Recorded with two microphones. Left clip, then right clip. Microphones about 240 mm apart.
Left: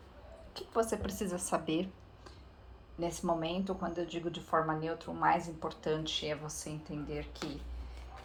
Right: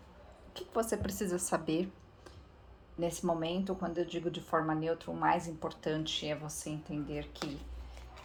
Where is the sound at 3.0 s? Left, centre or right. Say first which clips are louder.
Even; right.